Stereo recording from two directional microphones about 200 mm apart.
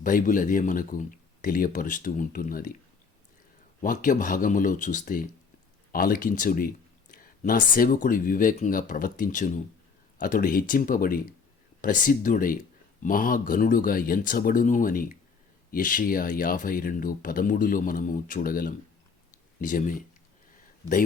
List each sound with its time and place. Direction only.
0.0 s speech: 45° left (ahead or behind)
3.8 s speech: 40° left (ahead or behind)